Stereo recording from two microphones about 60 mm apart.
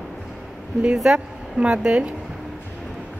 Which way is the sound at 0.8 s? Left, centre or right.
Centre.